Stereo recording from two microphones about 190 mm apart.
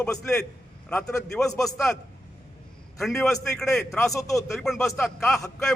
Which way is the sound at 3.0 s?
Centre (ahead or behind).